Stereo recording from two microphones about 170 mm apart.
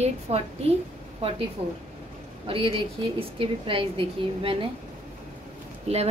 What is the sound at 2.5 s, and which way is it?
A woman's voice, 30° right (ahead or behind).